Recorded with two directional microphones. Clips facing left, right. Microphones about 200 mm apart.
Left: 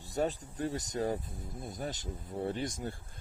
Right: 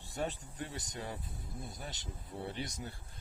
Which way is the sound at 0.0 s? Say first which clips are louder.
Left 6 dB; 40° left (ahead or behind).